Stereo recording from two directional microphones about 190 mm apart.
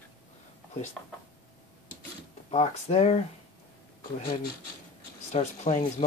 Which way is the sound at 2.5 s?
35° left (ahead or behind).